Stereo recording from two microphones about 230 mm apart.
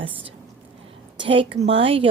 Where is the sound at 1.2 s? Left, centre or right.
Right.